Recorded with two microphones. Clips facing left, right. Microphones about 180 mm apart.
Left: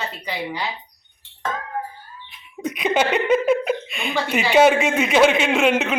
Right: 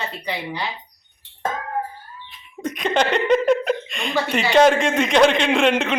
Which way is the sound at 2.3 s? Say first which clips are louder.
Even; 10° left (ahead or behind).